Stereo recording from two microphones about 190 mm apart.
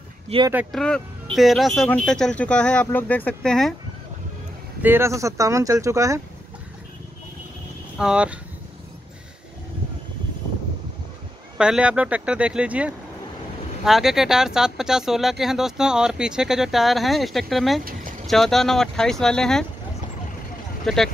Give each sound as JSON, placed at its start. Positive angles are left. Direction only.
{"t": 0.3, "sound": "speech", "side_deg": -30}
{"t": 0.7, "sound": "speech", "side_deg": 5}
{"t": 4.8, "sound": "speech", "side_deg": -15}
{"t": 8.0, "sound": "speech", "side_deg": -5}
{"t": 11.5, "sound": "speech", "side_deg": -5}
{"t": 20.8, "sound": "speech", "side_deg": 0}